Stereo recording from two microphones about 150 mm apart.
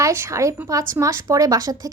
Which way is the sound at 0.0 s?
20° right (ahead or behind).